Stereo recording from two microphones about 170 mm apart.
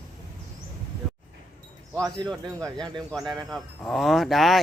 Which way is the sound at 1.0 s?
5° right (ahead or behind).